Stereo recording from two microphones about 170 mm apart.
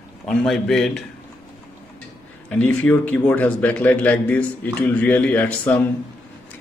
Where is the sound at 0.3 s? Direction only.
5° left (ahead or behind).